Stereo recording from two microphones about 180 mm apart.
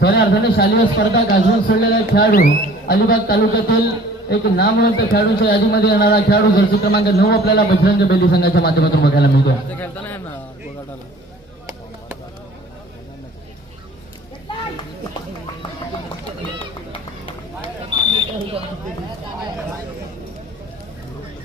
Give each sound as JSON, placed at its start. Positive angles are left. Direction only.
{"t": 0.0, "sound": "a man's voice", "side_deg": 60}
{"t": 9.7, "sound": "a man's voice", "side_deg": 10}
{"t": 17.8, "sound": "a sound", "side_deg": -30}